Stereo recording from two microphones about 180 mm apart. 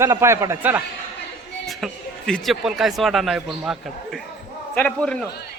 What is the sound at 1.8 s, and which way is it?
A man's voice, centre (ahead or behind).